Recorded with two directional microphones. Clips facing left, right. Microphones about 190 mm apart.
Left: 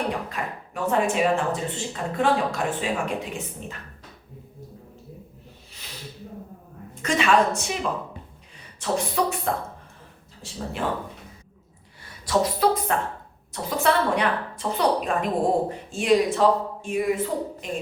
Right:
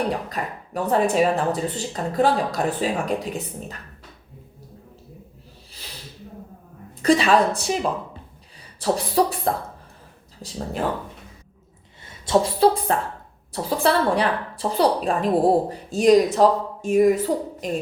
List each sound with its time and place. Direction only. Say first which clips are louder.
0.3 s a woman's voice: right 2 dB; 35° right (ahead or behind)
7.0 s a woman's voice: right 4 dB; 35° right (ahead or behind)
12.0 s a woman's voice: right 3 dB; 25° right (ahead or behind); by 17.2 s 40° right (ahead or behind)